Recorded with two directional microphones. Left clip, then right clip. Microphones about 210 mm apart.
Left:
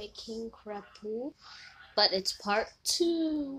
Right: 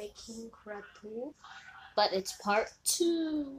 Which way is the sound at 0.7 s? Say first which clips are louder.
Left 1 dB; 30° left (ahead or behind).